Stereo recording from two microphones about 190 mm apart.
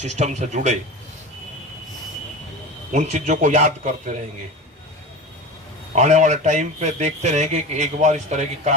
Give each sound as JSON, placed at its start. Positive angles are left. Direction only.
{"t": 0.0, "sound": "a man's voice", "side_deg": -35}
{"t": 2.9, "sound": "a man's voice", "side_deg": -40}
{"t": 5.9, "sound": "a man's voice", "side_deg": -40}